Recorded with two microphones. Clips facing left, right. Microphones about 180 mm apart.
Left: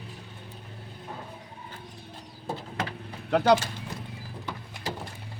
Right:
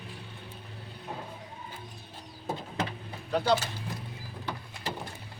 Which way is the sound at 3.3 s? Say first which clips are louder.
Left 5 dB; 70° left (ahead or behind).